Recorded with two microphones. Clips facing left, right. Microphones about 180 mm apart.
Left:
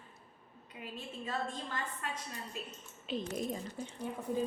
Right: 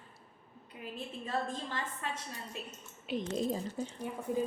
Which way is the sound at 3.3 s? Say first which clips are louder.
Right 7 dB; 30° right (ahead or behind).